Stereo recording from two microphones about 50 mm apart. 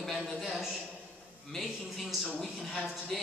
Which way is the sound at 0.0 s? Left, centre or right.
Centre.